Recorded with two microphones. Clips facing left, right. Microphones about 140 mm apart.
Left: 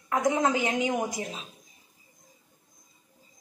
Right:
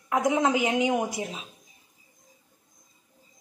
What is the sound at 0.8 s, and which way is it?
Speech, 20° right (ahead or behind).